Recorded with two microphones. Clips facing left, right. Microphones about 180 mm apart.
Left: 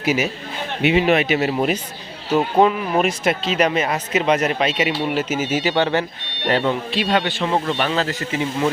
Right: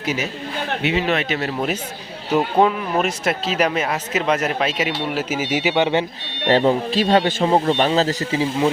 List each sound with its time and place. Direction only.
0.0 s a man's voice: 10° left (ahead or behind); by 6.1 s 20° right (ahead or behind)
6.5 s a man's voice: 35° right (ahead or behind)